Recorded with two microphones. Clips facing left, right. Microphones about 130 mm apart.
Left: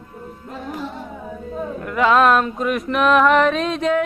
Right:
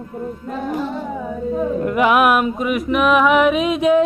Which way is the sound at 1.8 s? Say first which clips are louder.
Left 1 dB; 20° right (ahead or behind).